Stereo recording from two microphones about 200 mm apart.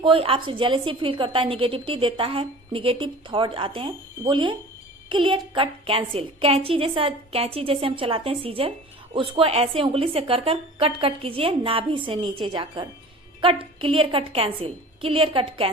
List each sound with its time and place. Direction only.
0.0 s a woman's voice: 25° right (ahead or behind)